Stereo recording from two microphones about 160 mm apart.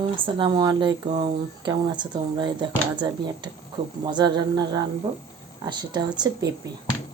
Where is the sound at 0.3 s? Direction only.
30° right (ahead or behind).